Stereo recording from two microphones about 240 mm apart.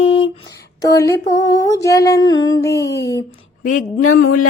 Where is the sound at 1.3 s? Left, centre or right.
Centre.